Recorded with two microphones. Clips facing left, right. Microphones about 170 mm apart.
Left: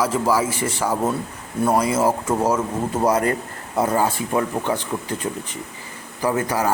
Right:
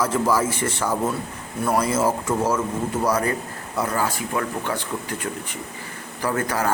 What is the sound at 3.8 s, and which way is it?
Speech, 25° left (ahead or behind).